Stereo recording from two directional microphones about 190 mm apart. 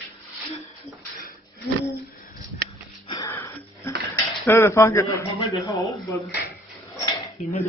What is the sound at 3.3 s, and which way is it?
Wheeze, 10° left (ahead or behind).